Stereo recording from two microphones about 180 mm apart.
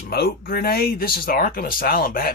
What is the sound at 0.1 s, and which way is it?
A man's voice, 60° left (ahead or behind).